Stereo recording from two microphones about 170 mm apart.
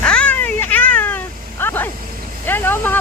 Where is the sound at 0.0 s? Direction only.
5° left (ahead or behind).